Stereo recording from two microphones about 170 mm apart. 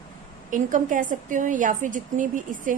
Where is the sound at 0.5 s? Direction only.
50° right (ahead or behind).